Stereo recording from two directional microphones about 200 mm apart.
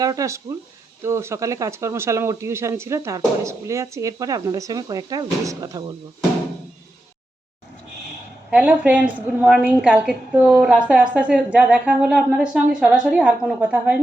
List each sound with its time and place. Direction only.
0.0 s speech: 15° right (ahead or behind)
8.4 s a woman's voice: 5° right (ahead or behind)